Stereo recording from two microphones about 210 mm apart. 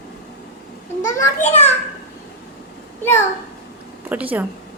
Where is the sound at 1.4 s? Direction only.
30° left (ahead or behind).